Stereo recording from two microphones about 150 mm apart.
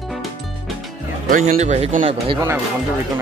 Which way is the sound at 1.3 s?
55° right (ahead or behind).